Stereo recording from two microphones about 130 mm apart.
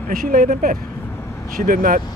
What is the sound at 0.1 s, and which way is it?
Speech, 90° right.